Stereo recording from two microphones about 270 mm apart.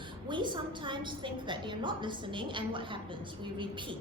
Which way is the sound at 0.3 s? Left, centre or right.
Centre.